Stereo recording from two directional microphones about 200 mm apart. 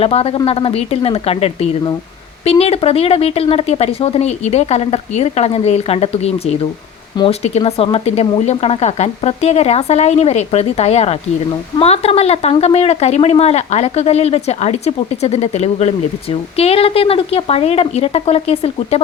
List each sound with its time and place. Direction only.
0.0 s a woman's voice: 30° left (ahead or behind)